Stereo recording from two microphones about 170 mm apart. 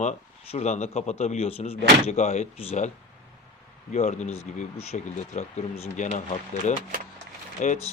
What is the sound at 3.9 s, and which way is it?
Speech, 40° left (ahead or behind).